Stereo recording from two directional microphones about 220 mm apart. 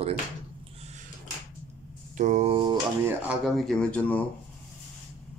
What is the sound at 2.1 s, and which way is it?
Speech, 35° right (ahead or behind).